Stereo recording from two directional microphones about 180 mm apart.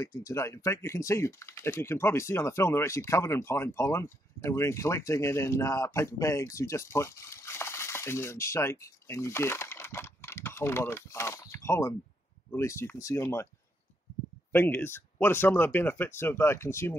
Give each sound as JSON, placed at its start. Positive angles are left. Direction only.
{"t": 0.0, "sound": "speech", "side_deg": 20}
{"t": 14.5, "sound": "speech", "side_deg": 10}